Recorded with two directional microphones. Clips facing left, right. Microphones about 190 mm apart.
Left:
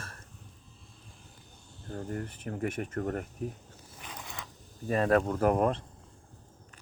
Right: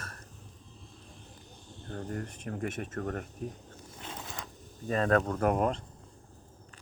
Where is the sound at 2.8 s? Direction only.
25° left (ahead or behind).